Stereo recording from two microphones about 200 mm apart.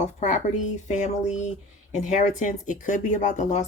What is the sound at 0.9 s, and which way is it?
Speech, 35° left (ahead or behind).